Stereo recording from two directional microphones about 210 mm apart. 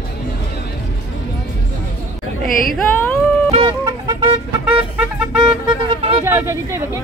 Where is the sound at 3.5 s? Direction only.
25° right (ahead or behind).